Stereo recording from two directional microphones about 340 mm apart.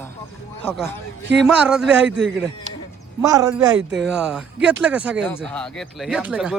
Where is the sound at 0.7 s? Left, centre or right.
Centre.